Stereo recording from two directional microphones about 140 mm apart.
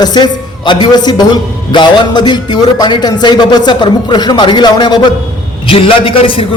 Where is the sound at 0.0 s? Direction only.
30° left (ahead or behind).